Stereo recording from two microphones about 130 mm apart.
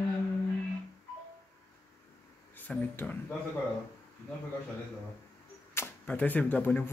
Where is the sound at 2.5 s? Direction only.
15° left (ahead or behind).